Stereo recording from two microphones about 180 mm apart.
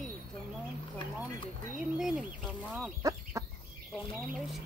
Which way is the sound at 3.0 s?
20° right (ahead or behind).